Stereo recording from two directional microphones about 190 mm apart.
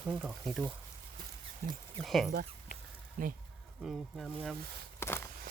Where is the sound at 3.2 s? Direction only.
40° right (ahead or behind).